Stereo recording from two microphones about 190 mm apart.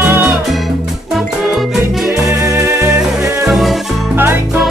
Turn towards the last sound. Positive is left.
turn(degrees=0)  # may be behind; listen again after turning